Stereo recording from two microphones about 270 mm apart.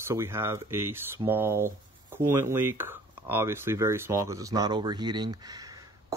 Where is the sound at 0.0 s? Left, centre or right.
Centre.